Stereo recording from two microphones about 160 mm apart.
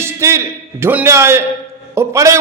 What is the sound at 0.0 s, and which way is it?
A man's voice, 15° right (ahead or behind).